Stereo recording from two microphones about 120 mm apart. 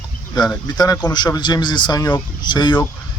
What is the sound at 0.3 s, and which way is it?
Speech, 35° left (ahead or behind).